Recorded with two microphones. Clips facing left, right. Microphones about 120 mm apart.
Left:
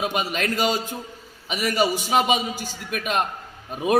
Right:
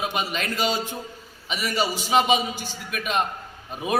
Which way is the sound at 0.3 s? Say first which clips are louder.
Left 3 dB; 45° left (ahead or behind).